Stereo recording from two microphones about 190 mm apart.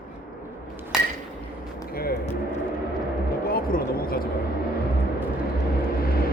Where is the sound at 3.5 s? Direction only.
50° left (ahead or behind).